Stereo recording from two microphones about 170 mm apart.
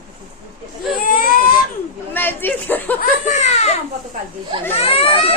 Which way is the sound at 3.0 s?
45° left (ahead or behind).